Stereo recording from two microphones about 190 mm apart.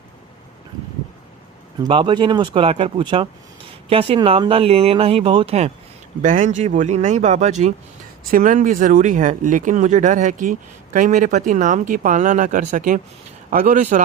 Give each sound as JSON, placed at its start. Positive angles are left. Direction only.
{"t": 1.9, "sound": "speech", "side_deg": -25}